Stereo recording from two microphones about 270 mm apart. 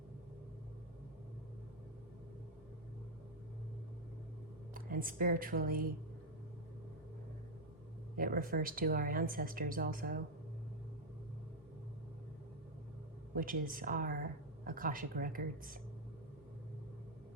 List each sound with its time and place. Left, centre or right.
4.7 s speech: right
8.1 s speech: right
13.3 s speech: right